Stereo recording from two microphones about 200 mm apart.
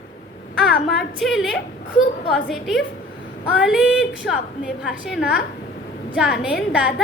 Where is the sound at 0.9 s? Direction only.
Centre (ahead or behind).